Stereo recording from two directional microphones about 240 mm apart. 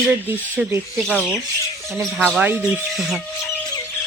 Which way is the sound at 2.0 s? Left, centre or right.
Centre.